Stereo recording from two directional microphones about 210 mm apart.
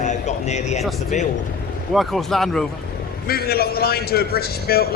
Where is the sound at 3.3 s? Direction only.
45° left (ahead or behind).